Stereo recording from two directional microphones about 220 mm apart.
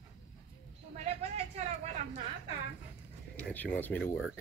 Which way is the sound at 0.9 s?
30° right (ahead or behind).